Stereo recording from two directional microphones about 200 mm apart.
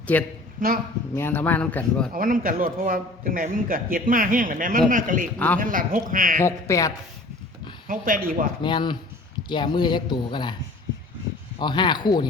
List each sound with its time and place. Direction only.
0.1 s speech: 10° left (ahead or behind)
2.1 s a man's voice: 45° right (ahead or behind)
6.4 s speech: 15° left (ahead or behind)
7.9 s a man's voice: 45° right (ahead or behind)
8.6 s speech: 25° left (ahead or behind)
11.6 s speech: 25° left (ahead or behind)